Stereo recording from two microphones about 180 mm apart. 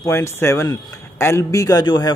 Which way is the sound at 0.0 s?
15° left (ahead or behind).